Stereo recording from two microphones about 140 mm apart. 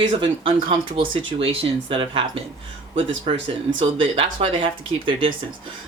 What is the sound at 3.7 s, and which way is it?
Speech, 40° right (ahead or behind).